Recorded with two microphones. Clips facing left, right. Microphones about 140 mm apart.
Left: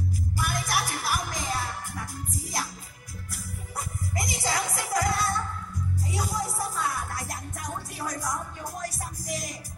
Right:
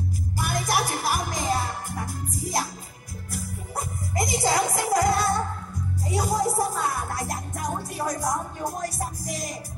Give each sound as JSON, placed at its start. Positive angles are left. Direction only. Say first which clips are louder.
{"t": 0.4, "sound": "music", "louder": "right 4 dB", "side_deg": -40}
{"t": 3.3, "sound": "music", "louder": "right 7 dB", "side_deg": -40}